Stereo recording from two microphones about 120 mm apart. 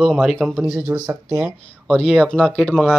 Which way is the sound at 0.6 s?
10° right (ahead or behind).